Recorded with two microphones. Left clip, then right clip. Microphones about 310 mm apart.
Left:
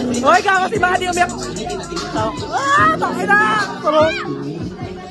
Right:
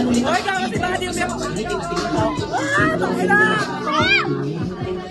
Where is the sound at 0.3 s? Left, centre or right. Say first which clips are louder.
Left 7 dB; left.